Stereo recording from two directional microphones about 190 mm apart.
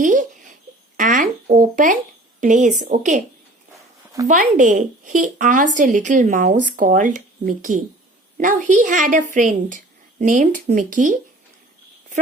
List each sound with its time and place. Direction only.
0.0 s a sound: 45° right (ahead or behind)
2.4 s a woman's voice: 40° right (ahead or behind)
4.3 s a woman's voice: 45° right (ahead or behind)